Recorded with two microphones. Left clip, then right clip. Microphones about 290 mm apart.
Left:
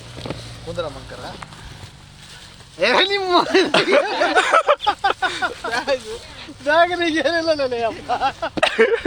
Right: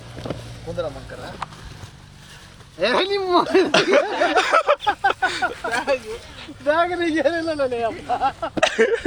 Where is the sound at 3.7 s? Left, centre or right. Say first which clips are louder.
Left 1 dB; centre.